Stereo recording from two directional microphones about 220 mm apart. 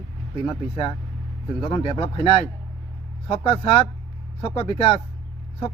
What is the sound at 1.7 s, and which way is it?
Speech, 25° left (ahead or behind).